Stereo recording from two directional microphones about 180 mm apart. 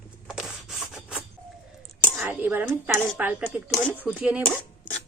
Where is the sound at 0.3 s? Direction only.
5° right (ahead or behind).